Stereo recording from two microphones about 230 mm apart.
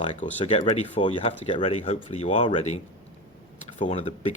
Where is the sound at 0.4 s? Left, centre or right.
Left.